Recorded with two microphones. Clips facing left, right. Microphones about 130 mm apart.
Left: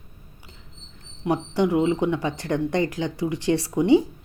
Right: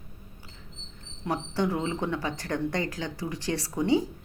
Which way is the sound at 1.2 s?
15° left (ahead or behind).